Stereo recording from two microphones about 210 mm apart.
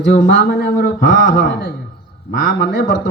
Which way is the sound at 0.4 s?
50° left (ahead or behind).